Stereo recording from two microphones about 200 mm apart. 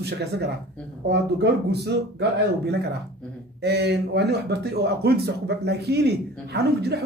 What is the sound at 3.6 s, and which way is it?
Speech, 55° right (ahead or behind).